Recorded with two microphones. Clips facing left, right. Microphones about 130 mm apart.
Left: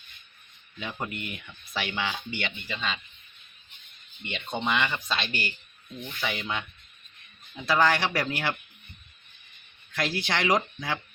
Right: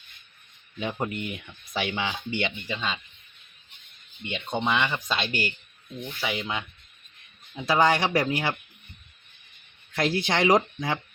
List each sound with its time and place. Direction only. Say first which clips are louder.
0.8 s speech: right 5 dB; 20° right (ahead or behind)
4.3 s speech: right 2 dB; 10° right (ahead or behind)
9.9 s speech: right 4 dB; 25° right (ahead or behind)